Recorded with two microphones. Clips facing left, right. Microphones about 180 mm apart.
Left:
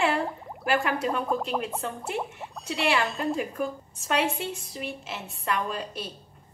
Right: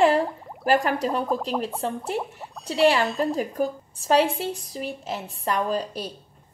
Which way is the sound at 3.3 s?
35° right (ahead or behind).